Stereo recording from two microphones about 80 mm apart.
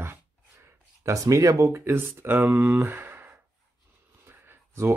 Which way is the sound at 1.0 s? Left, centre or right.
Right.